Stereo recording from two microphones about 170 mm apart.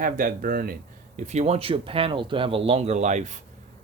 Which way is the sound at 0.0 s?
55° right (ahead or behind).